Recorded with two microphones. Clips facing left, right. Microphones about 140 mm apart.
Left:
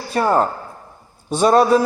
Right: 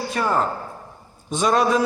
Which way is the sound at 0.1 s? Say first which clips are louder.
Left 6 dB; 35° left (ahead or behind).